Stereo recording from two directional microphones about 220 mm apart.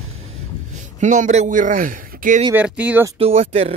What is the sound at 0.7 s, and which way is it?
Speech, 35° right (ahead or behind).